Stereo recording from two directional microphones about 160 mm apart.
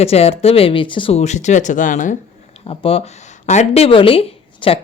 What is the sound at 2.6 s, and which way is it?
Speech, 35° left (ahead or behind).